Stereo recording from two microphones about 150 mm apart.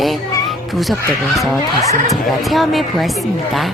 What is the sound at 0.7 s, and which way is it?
A woman's voice, centre (ahead or behind).